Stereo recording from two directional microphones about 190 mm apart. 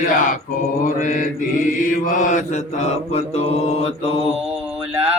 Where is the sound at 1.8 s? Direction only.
45° left (ahead or behind).